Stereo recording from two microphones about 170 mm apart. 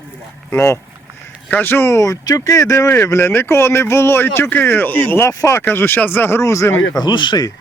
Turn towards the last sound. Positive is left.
turn(degrees=25)  # may be behind; listen again after turning